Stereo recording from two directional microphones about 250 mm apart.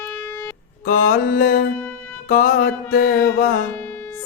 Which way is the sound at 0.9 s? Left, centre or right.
Left.